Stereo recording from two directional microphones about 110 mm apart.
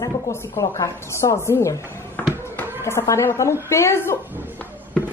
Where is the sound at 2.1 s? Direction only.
20° left (ahead or behind).